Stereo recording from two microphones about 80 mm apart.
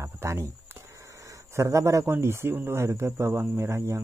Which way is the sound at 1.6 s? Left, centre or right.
Right.